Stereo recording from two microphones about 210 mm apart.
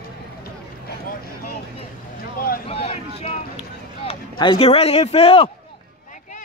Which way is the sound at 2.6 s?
30° left (ahead or behind).